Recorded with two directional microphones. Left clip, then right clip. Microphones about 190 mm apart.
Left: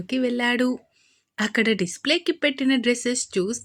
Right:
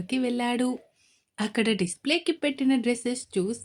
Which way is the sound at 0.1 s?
5° left (ahead or behind).